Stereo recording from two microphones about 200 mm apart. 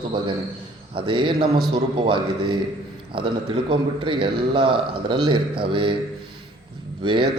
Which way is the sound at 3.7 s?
25° right (ahead or behind).